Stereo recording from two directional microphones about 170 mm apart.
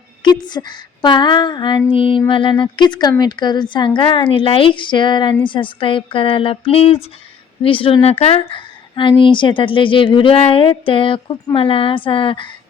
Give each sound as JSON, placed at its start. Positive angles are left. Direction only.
{"t": 0.2, "sound": "a woman's voice", "side_deg": 25}